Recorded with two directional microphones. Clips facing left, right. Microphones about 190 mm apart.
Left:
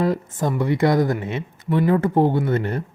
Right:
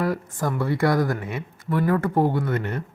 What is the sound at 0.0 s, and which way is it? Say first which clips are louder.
Speech: left 3 dB; 20° left (ahead or behind).